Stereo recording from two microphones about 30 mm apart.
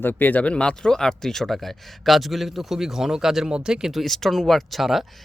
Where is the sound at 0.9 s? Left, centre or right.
Centre; by 3.9 s right.